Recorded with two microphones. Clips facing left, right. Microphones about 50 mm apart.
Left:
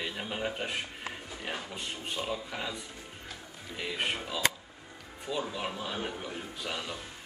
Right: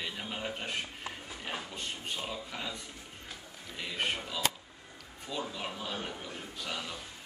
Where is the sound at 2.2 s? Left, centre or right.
Centre.